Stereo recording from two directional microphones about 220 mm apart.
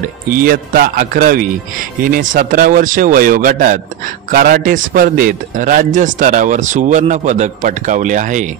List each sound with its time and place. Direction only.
0.3 s a man's voice: 40° right (ahead or behind)